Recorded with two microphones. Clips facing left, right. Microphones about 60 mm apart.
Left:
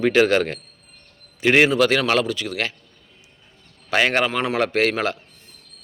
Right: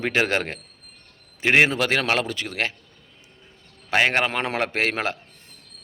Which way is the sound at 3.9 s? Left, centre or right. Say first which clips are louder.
Left 1 dB; centre.